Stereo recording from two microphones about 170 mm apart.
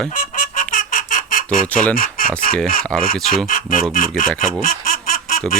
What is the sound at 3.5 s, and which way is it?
Speech, 55° left (ahead or behind).